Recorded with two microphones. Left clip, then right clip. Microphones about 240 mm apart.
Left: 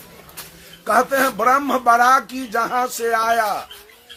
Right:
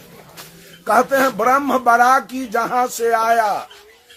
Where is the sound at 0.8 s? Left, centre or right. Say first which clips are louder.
Right 2 dB; centre.